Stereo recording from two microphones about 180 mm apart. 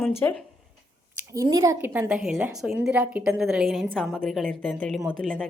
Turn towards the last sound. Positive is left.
turn(degrees=5)  # may be behind; listen again after turning